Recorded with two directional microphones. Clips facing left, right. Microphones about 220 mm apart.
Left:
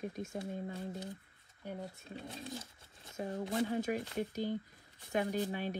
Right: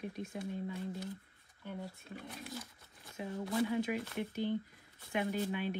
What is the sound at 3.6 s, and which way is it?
Speech, 45° left (ahead or behind).